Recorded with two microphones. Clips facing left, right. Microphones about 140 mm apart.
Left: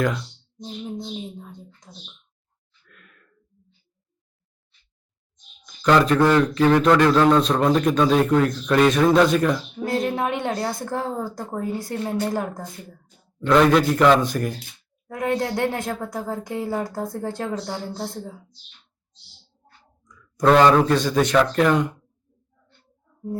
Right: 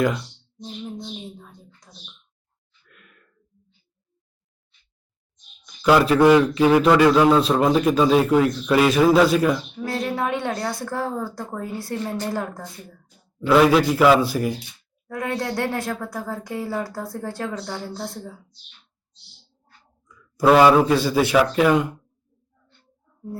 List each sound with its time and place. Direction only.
1.9 s a woman's voice: 15° left (ahead or behind)
2.9 s a sound: 5° right (ahead or behind)
5.8 s a man's voice: 5° right (ahead or behind)
9.8 s a woman's voice: 20° left (ahead or behind)
13.4 s a man's voice: 5° right (ahead or behind)
15.0 s speech: 20° left (ahead or behind)
20.1 s speech: 5° right (ahead or behind)